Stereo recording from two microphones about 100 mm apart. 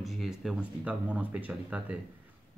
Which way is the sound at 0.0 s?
Centre (ahead or behind).